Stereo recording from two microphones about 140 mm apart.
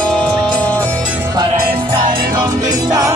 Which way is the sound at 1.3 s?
30° right (ahead or behind).